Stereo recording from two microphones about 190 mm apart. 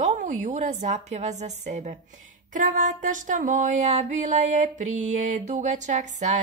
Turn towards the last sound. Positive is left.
turn(degrees=-40)  # may be behind; listen again after turning